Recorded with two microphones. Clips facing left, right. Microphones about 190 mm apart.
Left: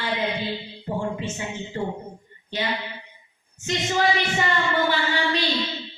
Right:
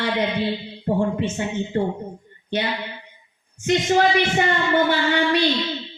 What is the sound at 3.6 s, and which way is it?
Speech, 55° right (ahead or behind).